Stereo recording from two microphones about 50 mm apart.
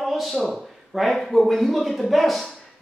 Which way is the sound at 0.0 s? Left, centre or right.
Centre.